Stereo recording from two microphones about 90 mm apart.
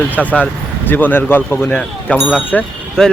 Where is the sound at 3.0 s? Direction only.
5° left (ahead or behind).